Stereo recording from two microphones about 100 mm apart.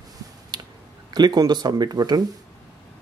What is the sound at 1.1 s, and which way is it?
Speech, 45° right (ahead or behind).